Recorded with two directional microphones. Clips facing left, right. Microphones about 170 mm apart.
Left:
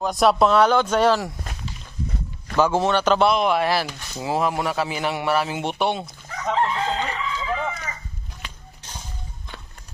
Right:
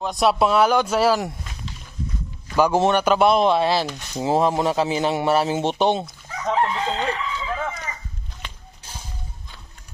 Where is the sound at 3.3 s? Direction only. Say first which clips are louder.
Right 2 dB; 25° right (ahead or behind).